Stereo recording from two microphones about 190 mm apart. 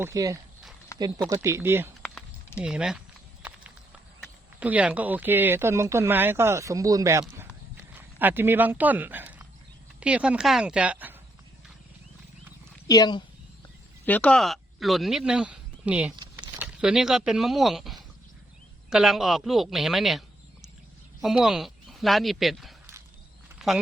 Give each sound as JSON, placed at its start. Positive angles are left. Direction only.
{"t": 0.0, "sound": "speech", "side_deg": -15}
{"t": 2.0, "sound": "a sound", "side_deg": 5}
{"t": 4.2, "sound": "speech", "side_deg": -5}
{"t": 7.8, "sound": "clip-clop", "side_deg": -10}
{"t": 10.0, "sound": "speech", "side_deg": -5}
{"t": 12.9, "sound": "speech", "side_deg": 20}
{"t": 14.0, "sound": "speech", "side_deg": 5}